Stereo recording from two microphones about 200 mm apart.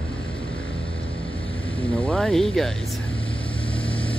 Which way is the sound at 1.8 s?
25° left (ahead or behind).